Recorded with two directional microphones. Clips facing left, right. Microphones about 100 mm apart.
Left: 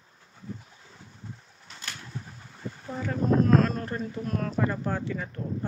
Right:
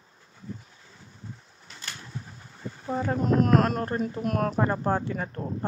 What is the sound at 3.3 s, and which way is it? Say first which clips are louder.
Speech: even; 70° right (ahead or behind).